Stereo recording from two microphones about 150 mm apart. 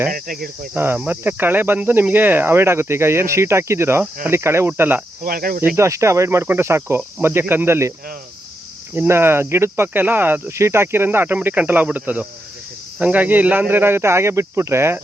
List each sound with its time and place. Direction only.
0.1 s cricket: 80° right
0.7 s speech: 10° right (ahead or behind)
5.2 s cricket: 75° right (ahead or behind)
5.7 s speech: 20° right (ahead or behind)
9.0 s speech: 15° right (ahead or behind)